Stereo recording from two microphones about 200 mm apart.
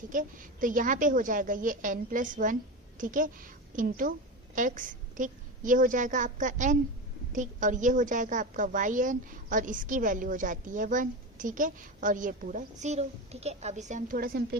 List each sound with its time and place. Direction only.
0.1 s a woman's voice: 40° right (ahead or behind)